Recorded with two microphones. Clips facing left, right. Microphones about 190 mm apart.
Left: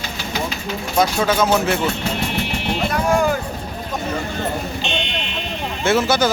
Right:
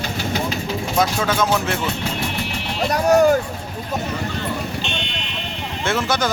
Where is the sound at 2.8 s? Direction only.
40° right (ahead or behind).